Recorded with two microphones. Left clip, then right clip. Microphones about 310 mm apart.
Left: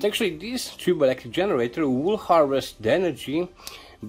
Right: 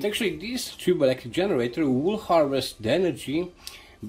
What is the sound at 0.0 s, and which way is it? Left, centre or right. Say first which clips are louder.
Speech: left 2 dB; left.